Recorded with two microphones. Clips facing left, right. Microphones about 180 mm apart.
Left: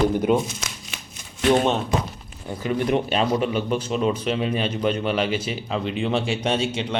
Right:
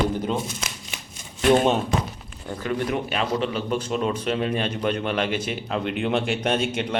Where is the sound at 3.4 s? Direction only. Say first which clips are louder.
Left 2 dB; 5° left (ahead or behind).